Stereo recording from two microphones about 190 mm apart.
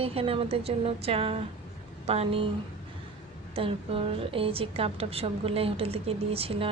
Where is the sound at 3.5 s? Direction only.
30° right (ahead or behind).